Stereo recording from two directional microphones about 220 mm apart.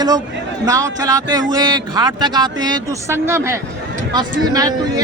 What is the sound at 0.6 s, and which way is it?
Speech, 15° right (ahead or behind).